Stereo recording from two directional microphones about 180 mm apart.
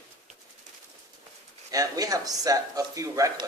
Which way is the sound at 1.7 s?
20° right (ahead or behind).